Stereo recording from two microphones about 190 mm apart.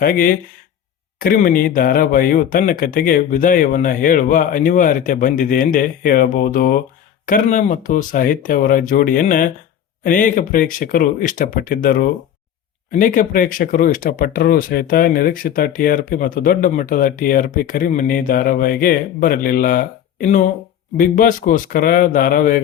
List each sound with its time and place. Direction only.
0.0 s speech: 45° left (ahead or behind)
20.9 s speech: 45° left (ahead or behind)